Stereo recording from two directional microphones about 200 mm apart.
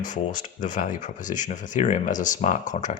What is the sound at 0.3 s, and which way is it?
Speech, 40° left (ahead or behind).